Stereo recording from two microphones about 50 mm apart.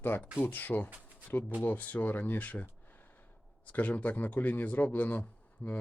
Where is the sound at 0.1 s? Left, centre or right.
Left.